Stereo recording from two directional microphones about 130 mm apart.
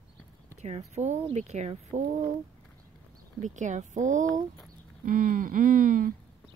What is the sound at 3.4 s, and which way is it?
Speech, 70° right (ahead or behind).